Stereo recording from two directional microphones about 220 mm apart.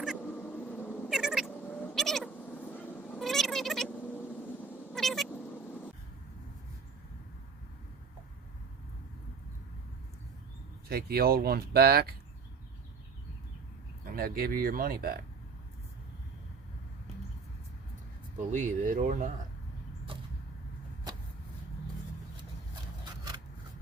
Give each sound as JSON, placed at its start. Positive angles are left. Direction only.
{"t": 0.2, "sound": "cat", "side_deg": 10}
{"t": 1.1, "sound": "cat", "side_deg": 0}
{"t": 1.5, "sound": "cat", "side_deg": 10}
{"t": 10.8, "sound": "speech", "side_deg": -45}
{"t": 14.0, "sound": "speech", "side_deg": -40}
{"t": 18.3, "sound": "speech", "side_deg": -35}